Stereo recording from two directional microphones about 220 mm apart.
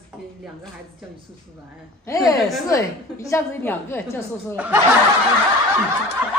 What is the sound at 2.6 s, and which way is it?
A woman's voice, 15° left (ahead or behind).